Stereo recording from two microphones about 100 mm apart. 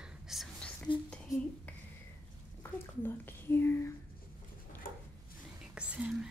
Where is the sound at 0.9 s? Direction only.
55° left (ahead or behind).